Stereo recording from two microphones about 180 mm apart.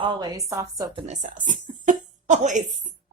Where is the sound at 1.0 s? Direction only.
40° right (ahead or behind).